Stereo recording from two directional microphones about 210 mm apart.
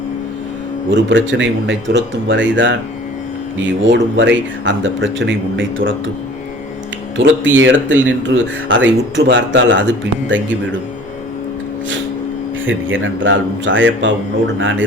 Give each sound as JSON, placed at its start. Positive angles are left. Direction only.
{"t": 0.9, "sound": "speech", "side_deg": -60}
{"t": 3.8, "sound": "speech", "side_deg": -60}
{"t": 7.2, "sound": "speech", "side_deg": -60}
{"t": 12.6, "sound": "speech", "side_deg": -65}